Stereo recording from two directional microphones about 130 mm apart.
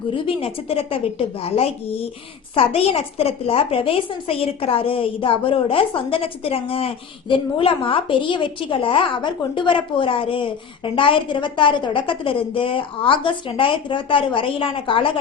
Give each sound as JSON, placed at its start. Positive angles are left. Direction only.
{"t": 0.1, "sound": "a woman's voice", "side_deg": 45}